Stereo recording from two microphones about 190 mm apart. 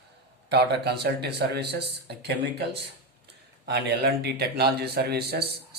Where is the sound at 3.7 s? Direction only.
60° right (ahead or behind).